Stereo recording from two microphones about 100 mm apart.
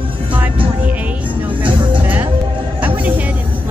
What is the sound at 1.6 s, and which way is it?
Music, 15° right (ahead or behind).